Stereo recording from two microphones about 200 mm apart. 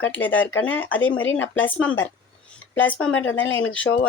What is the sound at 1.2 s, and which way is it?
Speech, 75° left (ahead or behind).